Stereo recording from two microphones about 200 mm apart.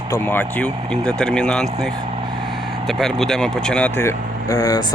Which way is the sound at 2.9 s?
Centre (ahead or behind).